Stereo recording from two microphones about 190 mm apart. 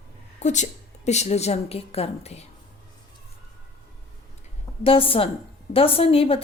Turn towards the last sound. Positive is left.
turn(degrees=30)  # may be behind; listen again after turning